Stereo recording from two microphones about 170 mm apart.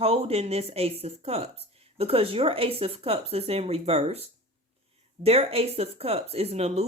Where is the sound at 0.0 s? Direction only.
35° right (ahead or behind).